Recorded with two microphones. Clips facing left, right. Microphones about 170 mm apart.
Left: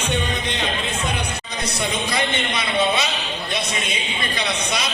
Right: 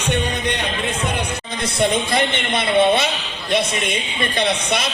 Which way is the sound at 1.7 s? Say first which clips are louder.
Right 7 dB; 55° right (ahead or behind).